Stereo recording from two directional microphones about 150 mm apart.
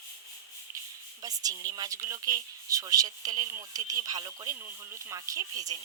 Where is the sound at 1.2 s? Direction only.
25° right (ahead or behind).